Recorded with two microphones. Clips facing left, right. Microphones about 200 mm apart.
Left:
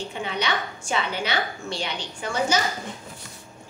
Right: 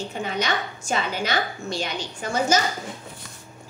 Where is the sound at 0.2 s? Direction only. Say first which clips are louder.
Right 1 dB; 40° right (ahead or behind).